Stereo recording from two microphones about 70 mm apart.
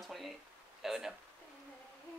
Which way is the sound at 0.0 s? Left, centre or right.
Centre.